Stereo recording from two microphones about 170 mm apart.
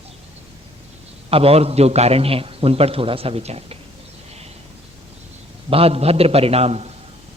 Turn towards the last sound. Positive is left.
turn(degrees=-40)  # may be behind; listen again after turning